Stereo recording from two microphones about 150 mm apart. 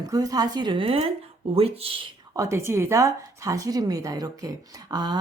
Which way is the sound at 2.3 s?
20° right (ahead or behind).